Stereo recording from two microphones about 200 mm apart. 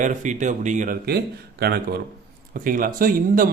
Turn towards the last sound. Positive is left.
turn(degrees=-45)  # may be behind; listen again after turning